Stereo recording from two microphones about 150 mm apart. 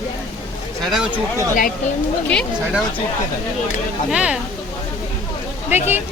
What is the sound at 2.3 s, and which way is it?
Speech, 5° left (ahead or behind).